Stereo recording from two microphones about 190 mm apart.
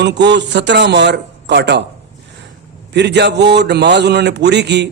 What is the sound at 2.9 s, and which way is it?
A man's voice, 60° right (ahead or behind).